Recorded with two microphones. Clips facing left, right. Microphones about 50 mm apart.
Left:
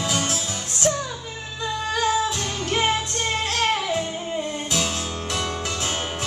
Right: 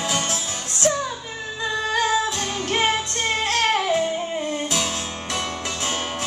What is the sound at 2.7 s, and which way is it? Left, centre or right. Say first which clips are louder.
Music: right 1 dB; right.